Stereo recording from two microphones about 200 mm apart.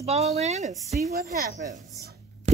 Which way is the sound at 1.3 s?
45° right (ahead or behind).